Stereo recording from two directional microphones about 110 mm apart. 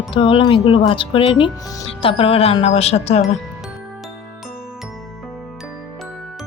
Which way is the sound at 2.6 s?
75° left (ahead or behind).